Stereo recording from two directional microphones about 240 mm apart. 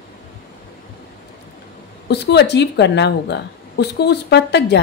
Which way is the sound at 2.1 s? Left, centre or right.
Left.